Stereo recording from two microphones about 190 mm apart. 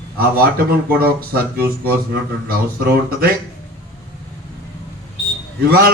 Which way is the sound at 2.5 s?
50° right (ahead or behind).